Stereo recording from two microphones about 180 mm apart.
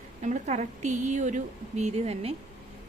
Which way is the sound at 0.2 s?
45° right (ahead or behind).